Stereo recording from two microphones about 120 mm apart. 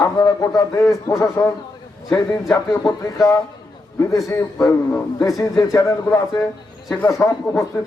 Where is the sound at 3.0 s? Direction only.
30° left (ahead or behind).